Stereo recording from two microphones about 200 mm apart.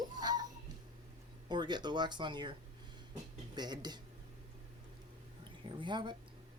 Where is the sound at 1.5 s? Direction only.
20° right (ahead or behind).